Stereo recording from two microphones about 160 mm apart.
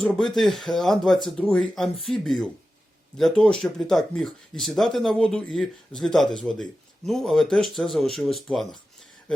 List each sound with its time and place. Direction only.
0.0 s speech: centre (ahead or behind)